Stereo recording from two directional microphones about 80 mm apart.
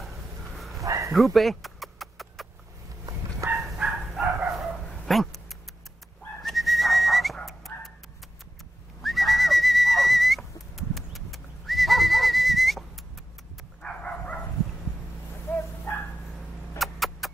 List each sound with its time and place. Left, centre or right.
0.6 s a sound: centre
0.8 s bow-wow: right
1.1 s chicken: centre
3.7 s dog: centre
5.0 s dog: centre
6.4 s whistling: centre
7.4 s dog: centre
9.0 s whistle: centre
13.8 s dog: centre
15.4 s bow-wow: left
16.7 s vehicle: centre